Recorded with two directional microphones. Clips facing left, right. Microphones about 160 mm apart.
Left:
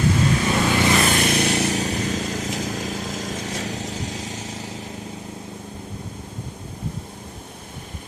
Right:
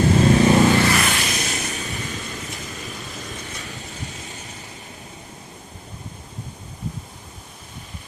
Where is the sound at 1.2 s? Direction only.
60° left (ahead or behind); by 4.7 s 90° left.